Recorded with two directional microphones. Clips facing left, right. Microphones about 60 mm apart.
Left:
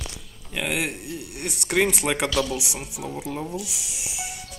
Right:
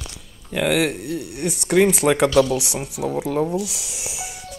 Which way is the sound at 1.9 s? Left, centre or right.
Right.